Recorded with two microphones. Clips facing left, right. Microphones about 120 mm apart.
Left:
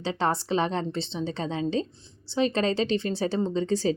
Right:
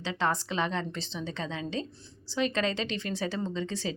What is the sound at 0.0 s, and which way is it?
A woman's voice, 30° left (ahead or behind).